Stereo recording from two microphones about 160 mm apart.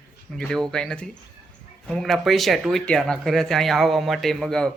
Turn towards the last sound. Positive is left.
turn(degrees=5)  # may be behind; listen again after turning